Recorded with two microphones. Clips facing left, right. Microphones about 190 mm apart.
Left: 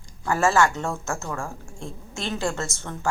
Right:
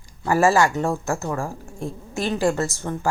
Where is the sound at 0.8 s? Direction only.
35° right (ahead or behind).